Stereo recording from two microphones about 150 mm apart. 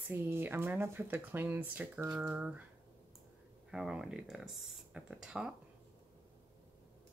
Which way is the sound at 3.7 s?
5° right (ahead or behind).